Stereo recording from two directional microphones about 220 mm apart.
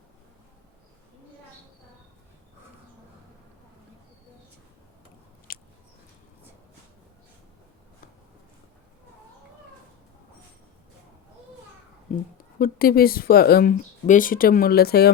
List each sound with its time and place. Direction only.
5.5 s biting: 40° left (ahead or behind)
12.1 s a sound: 35° left (ahead or behind)
12.5 s speech: 40° left (ahead or behind)